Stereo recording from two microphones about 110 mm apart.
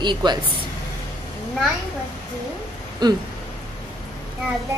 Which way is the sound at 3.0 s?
40° right (ahead or behind).